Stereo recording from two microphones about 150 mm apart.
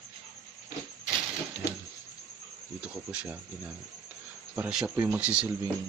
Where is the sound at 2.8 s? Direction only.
10° right (ahead or behind).